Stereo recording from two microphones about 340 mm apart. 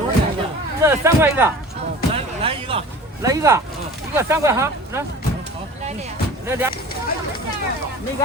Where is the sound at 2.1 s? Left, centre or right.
Centre.